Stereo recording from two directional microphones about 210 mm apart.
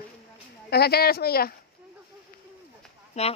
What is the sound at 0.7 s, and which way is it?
Speech, 50° left (ahead or behind).